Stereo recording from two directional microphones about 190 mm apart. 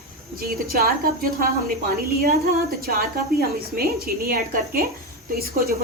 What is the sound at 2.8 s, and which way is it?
A woman's voice, 50° right (ahead or behind).